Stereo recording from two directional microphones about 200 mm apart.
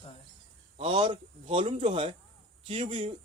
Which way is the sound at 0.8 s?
25° right (ahead or behind).